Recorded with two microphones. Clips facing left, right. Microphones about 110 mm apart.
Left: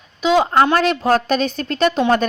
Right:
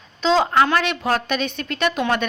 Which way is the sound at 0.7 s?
40° left (ahead or behind).